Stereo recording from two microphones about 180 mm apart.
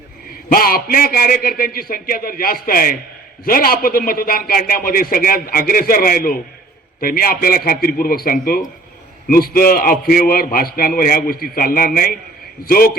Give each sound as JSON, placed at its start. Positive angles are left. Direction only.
{"t": 0.5, "sound": "a man's voice", "side_deg": 55}